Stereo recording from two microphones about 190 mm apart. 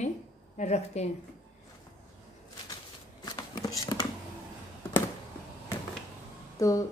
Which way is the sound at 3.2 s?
20° left (ahead or behind).